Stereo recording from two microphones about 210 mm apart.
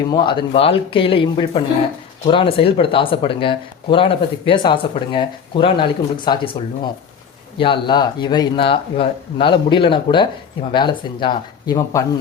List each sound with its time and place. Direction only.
0.1 s speech: 20° left (ahead or behind)